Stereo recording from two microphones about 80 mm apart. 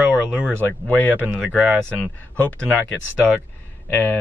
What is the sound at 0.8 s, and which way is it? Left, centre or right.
Speech, centre.